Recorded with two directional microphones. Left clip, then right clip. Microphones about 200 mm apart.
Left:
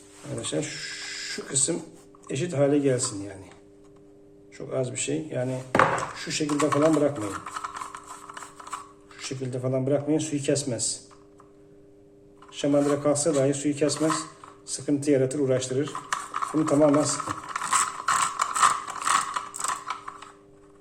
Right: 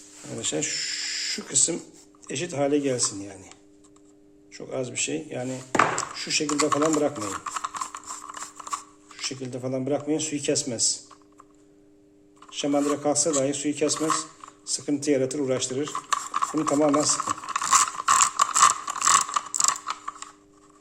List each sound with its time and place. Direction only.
0.4 s speech: 35° right (ahead or behind)
4.5 s speech: 25° right (ahead or behind)
6.8 s a sound: 35° right (ahead or behind)
8.6 s speech: 25° right (ahead or behind)
12.5 s speech: 25° right (ahead or behind)
14.7 s dishes: 25° right (ahead or behind)